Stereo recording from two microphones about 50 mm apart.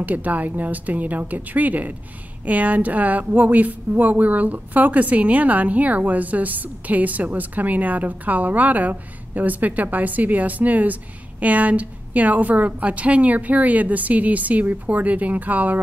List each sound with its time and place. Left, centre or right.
0.0 s a woman's voice: right